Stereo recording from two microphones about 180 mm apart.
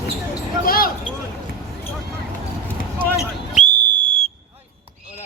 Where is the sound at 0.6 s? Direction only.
55° left (ahead or behind).